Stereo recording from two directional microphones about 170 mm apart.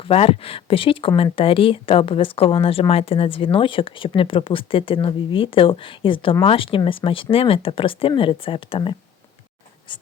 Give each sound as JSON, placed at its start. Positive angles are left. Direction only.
{"t": 0.0, "sound": "speech", "side_deg": 35}
{"t": 9.9, "sound": "writing", "side_deg": 30}